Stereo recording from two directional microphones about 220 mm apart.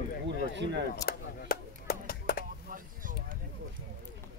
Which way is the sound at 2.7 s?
40° right (ahead or behind).